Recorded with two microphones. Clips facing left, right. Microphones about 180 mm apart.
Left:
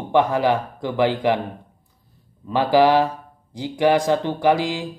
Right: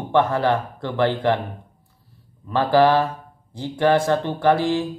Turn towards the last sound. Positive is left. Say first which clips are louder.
# right 1 dB
turn(degrees=15)  # may be behind; listen again after turning